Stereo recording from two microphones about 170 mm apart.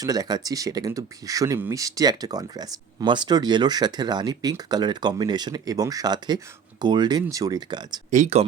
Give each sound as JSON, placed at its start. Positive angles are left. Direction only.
{"t": 0.0, "sound": "speech", "side_deg": -20}
{"t": 8.1, "sound": "speech", "side_deg": -40}